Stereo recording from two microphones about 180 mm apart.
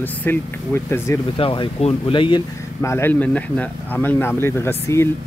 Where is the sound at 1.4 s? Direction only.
30° left (ahead or behind).